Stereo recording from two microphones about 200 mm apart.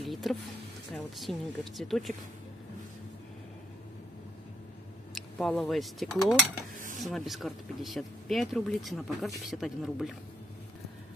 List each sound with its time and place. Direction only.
0.0 s speech: centre (ahead or behind)
5.4 s speech: centre (ahead or behind)